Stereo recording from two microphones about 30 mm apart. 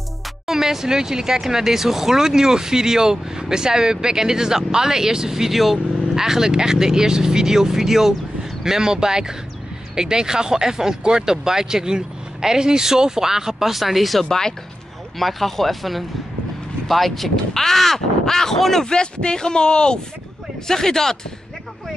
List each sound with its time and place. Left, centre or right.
0.5 s speech: centre
18.9 s speech: left
20.6 s speech: centre